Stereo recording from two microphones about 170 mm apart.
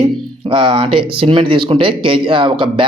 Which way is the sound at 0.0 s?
30° right (ahead or behind).